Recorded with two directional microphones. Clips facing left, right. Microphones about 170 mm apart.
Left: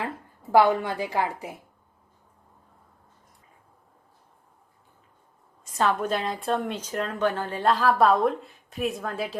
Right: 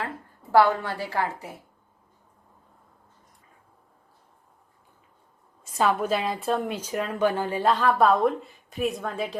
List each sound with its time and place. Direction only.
0.5 s a woman's voice: 15° left (ahead or behind)
5.7 s a woman's voice: 10° right (ahead or behind)
7.6 s a woman's voice: centre (ahead or behind)